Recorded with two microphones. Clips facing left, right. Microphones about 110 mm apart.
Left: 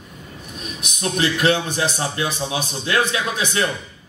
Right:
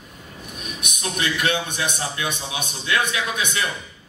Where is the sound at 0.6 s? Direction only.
30° left (ahead or behind).